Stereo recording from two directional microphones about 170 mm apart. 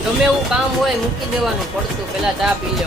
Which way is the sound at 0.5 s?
5° right (ahead or behind).